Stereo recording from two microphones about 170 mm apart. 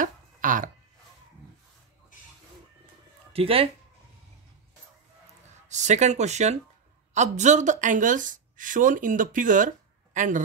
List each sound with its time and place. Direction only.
0.0 s a sound: 50° right (ahead or behind)
3.3 s speech: 35° right (ahead or behind)
5.7 s speech: 45° right (ahead or behind)